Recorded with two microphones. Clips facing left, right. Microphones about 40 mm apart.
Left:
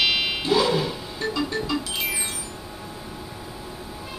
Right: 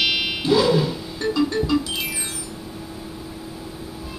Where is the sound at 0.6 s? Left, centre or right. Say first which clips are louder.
Right 3 dB; centre.